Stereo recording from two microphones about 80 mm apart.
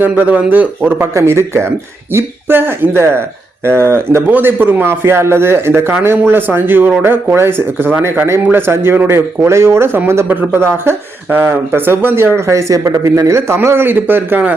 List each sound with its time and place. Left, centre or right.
0.0 s speech: right
0.9 s speech: right